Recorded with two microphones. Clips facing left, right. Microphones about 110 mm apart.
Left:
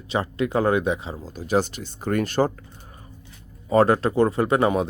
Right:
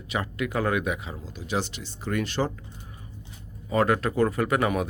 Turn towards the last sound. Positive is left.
turn(degrees=30)  # may be behind; listen again after turning